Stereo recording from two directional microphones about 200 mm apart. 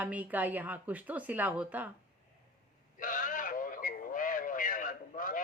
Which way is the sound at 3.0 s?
40° left (ahead or behind).